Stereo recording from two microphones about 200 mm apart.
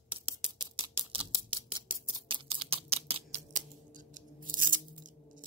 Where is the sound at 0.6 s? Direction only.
20° right (ahead or behind).